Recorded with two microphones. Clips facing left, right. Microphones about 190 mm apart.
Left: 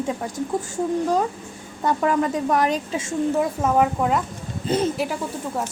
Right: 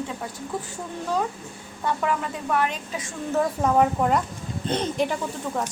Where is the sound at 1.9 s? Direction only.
40° left (ahead or behind).